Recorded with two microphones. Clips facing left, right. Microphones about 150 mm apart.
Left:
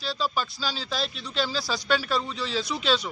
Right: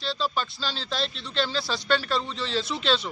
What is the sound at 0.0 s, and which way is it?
Speech, 5° left (ahead or behind).